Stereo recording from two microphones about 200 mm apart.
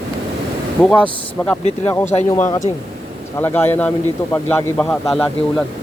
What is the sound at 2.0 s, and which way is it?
Speech, 35° left (ahead or behind).